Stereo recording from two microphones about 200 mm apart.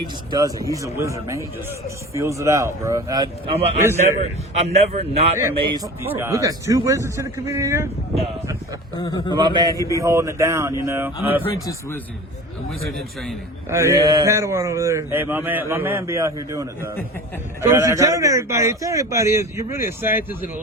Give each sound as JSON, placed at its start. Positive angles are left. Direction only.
{"t": 0.3, "sound": "speech", "side_deg": -20}
{"t": 3.5, "sound": "a man's voice", "side_deg": -30}
{"t": 9.0, "sound": "a man's voice", "side_deg": 20}
{"t": 9.3, "sound": "a man's voice", "side_deg": -20}
{"t": 9.7, "sound": "speech", "side_deg": 15}
{"t": 10.0, "sound": "speech", "side_deg": -15}
{"t": 11.4, "sound": "speech", "side_deg": 10}
{"t": 13.7, "sound": "speech", "side_deg": -15}